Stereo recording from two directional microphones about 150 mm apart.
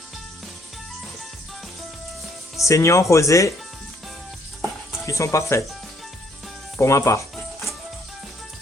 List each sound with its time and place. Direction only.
2.6 s speech: 20° left (ahead or behind)
5.0 s speech: 20° left (ahead or behind)
6.7 s speech: 20° left (ahead or behind)
7.3 s music: centre (ahead or behind)